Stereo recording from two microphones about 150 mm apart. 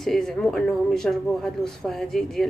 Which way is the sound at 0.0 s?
Centre (ahead or behind).